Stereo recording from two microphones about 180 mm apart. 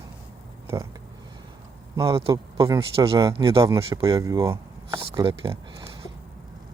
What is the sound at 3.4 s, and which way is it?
Speech, 30° right (ahead or behind).